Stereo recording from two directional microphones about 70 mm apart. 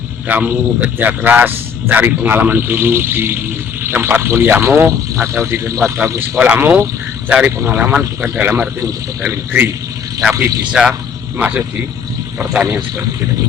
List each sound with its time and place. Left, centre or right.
0.3 s a man's voice: right
6.1 s a man's voice: right
10.7 s speech: centre
11.3 s a man's voice: right